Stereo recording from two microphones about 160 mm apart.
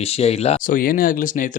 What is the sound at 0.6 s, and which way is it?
Speech, 60° left (ahead or behind).